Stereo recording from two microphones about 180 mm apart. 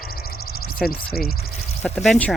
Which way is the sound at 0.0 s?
55° left (ahead or behind).